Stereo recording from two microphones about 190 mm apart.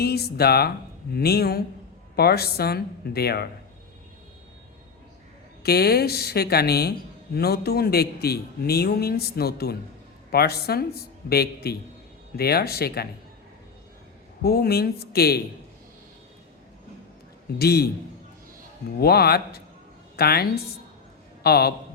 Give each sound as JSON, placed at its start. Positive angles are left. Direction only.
{"t": 0.0, "sound": "a man's voice", "side_deg": 55}
{"t": 5.6, "sound": "a man's voice", "side_deg": 55}
{"t": 14.4, "sound": "a man's voice", "side_deg": 55}
{"t": 17.6, "sound": "a man's voice", "side_deg": 55}
{"t": 18.9, "sound": "a man's voice", "side_deg": 55}